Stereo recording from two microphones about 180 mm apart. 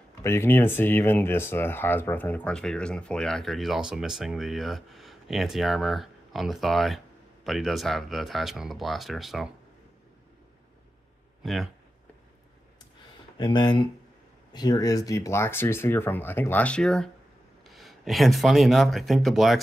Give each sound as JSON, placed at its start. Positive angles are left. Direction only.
{"t": 0.2, "sound": "speech", "side_deg": 15}
{"t": 11.4, "sound": "speech", "side_deg": 0}
{"t": 13.4, "sound": "speech", "side_deg": 25}